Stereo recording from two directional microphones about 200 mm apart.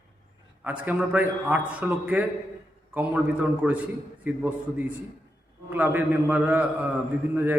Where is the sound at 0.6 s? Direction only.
5° right (ahead or behind).